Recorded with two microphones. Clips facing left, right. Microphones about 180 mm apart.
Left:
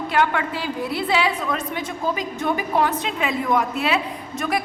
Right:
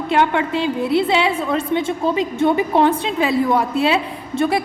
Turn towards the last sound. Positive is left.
turn(degrees=-30)  # may be behind; listen again after turning